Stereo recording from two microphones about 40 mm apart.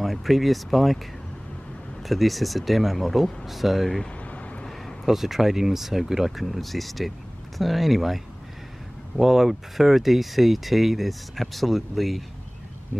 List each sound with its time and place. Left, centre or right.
0.0 s speech: centre
2.0 s speech: centre
4.2 s vehicle: left
5.0 s speech: centre